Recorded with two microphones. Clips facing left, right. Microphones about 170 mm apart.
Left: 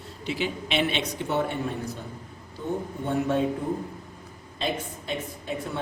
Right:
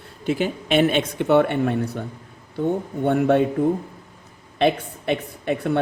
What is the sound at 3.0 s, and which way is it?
Speech, 60° right (ahead or behind).